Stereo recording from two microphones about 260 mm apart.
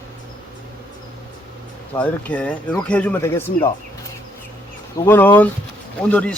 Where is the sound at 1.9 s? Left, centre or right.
Centre.